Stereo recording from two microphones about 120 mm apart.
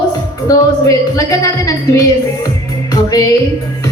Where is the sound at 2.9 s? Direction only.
30° left (ahead or behind).